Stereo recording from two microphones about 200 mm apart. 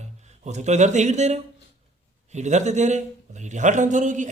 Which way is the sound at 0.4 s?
35° right (ahead or behind).